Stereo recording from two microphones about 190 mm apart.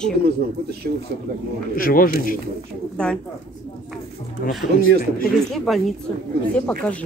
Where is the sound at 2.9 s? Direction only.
5° left (ahead or behind).